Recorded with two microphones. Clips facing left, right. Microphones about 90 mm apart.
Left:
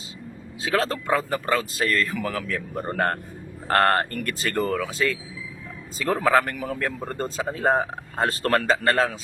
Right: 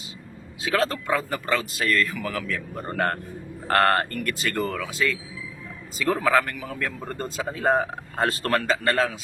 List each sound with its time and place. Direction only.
0.6 s a man's voice: 30° left (ahead or behind)